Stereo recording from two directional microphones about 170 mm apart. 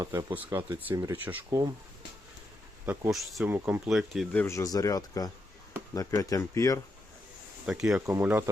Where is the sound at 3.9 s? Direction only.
Centre (ahead or behind).